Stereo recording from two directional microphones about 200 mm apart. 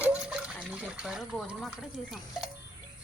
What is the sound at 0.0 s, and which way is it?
Water, 5° right (ahead or behind).